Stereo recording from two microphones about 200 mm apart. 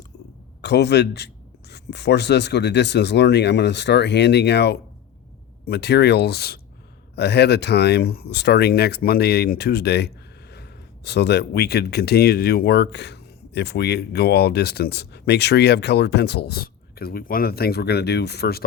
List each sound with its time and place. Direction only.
0.6 s speech: 55° left (ahead or behind)